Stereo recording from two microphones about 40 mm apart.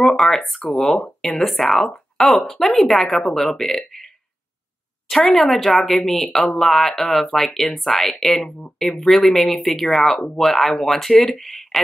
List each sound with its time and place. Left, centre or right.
0.0 s speech: centre
5.3 s speech: centre